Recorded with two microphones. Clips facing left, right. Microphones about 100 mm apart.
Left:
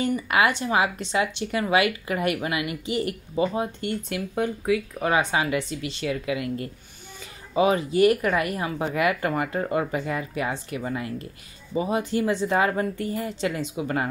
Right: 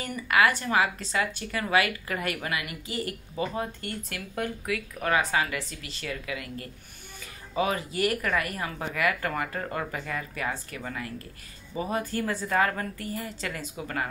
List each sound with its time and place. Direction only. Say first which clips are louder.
0.1 s speech: left 2 dB; 25° left (ahead or behind)